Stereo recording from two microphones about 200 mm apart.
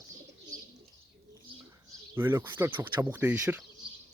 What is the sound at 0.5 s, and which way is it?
Bird, 15° right (ahead or behind).